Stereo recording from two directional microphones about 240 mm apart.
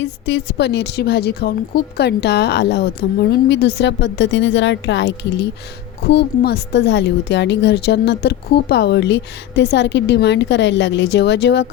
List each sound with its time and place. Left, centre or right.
0.0 s a woman's voice: left